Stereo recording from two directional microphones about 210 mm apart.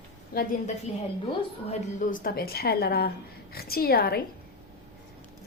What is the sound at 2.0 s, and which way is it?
A woman's voice, 40° left (ahead or behind).